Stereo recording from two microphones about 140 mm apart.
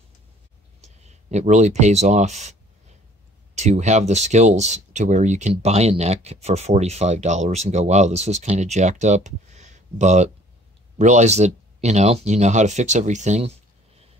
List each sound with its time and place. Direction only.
0.8 s speech: 50° right (ahead or behind)
3.5 s speech: 55° right (ahead or behind)